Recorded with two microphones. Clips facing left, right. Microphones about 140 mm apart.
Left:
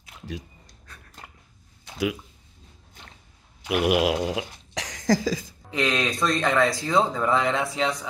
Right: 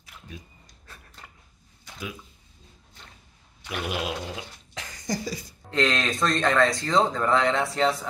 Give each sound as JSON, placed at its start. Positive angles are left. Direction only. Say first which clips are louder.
{"t": 3.8, "sound": "speech", "louder": "left 9 dB", "side_deg": 90}
{"t": 5.7, "sound": "speech", "louder": "even", "side_deg": 0}